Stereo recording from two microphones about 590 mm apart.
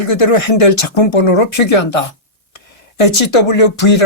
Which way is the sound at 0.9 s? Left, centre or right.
Left.